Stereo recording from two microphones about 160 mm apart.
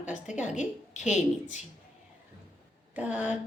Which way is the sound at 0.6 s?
50° left (ahead or behind).